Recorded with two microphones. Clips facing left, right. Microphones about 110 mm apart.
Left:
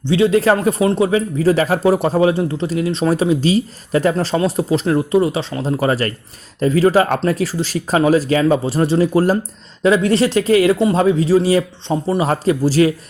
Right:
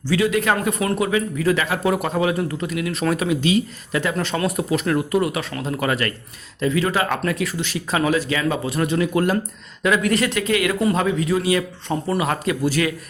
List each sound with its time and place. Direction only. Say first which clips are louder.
0.0 s speech: left 6 dB; 25° left (ahead or behind)